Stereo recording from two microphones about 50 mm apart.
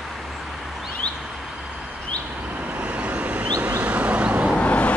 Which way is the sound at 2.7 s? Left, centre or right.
Right.